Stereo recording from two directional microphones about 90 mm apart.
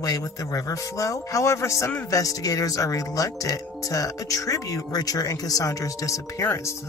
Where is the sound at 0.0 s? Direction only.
45° left (ahead or behind).